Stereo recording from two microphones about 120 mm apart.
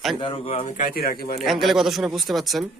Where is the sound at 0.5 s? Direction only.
85° left.